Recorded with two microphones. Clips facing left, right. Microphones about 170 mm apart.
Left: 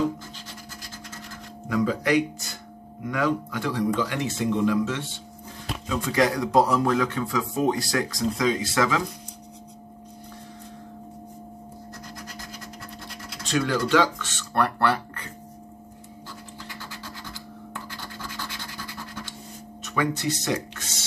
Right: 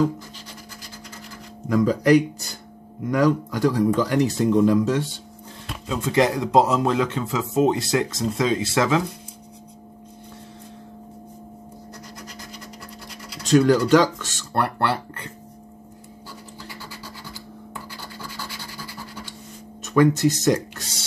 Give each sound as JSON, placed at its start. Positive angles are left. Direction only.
{"t": 1.7, "sound": "speech", "side_deg": -40}
{"t": 5.9, "sound": "speech", "side_deg": -25}
{"t": 13.5, "sound": "speech", "side_deg": -45}
{"t": 14.6, "sound": "speech", "side_deg": -25}
{"t": 19.9, "sound": "speech", "side_deg": -45}